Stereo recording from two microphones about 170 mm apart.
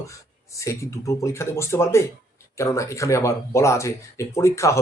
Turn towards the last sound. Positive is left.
turn(degrees=15)  # may be behind; listen again after turning